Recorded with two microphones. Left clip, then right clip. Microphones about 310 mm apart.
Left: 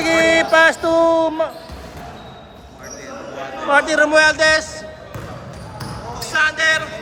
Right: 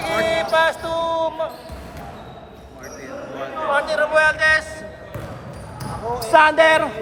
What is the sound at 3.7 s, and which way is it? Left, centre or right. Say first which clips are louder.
Speech: left 5 dB; left.